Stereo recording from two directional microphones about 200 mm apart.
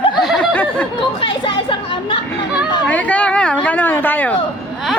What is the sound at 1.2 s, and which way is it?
Speech, 25° left (ahead or behind).